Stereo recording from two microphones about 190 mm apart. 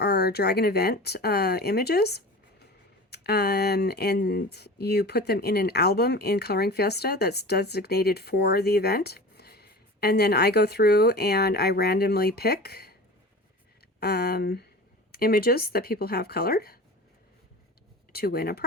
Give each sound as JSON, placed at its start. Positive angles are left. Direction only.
{"t": 0.0, "sound": "speech", "side_deg": 55}
{"t": 14.0, "sound": "speech", "side_deg": 60}
{"t": 18.1, "sound": "speech", "side_deg": 55}